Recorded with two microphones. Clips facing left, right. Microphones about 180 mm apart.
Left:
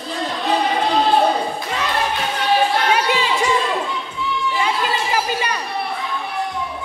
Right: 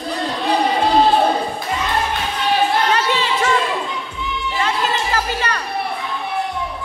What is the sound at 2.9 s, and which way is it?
Music, 10° left (ahead or behind).